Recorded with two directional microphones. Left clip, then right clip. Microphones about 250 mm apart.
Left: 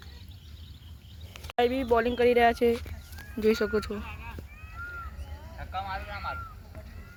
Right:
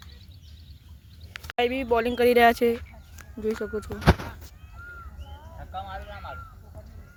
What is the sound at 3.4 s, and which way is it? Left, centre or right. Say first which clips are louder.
Speech: left 4 dB; centre.